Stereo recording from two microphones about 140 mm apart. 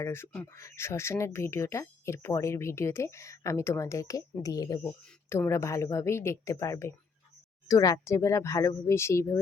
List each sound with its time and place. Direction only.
0.0 s speech: 15° left (ahead or behind)